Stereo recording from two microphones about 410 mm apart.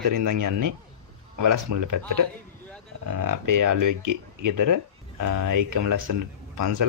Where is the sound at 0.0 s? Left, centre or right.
Right.